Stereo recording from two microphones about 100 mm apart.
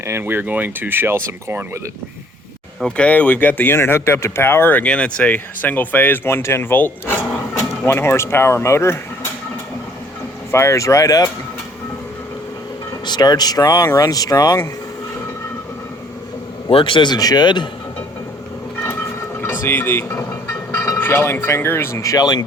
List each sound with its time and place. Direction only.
0.0 s speech: 25° right (ahead or behind)
2.8 s speech: 10° left (ahead or behind); by 9.0 s 30° left (ahead or behind)
10.5 s speech: 30° left (ahead or behind)
13.1 s speech: 45° left (ahead or behind)
16.6 s a man's voice: 60° left (ahead or behind)
19.6 s speech: 20° left (ahead or behind); by 22.4 s 40° left (ahead or behind)